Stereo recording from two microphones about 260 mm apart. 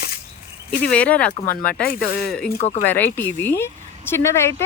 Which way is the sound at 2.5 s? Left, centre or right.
Left.